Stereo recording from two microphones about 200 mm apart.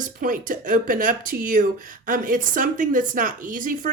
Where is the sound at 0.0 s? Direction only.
45° right (ahead or behind).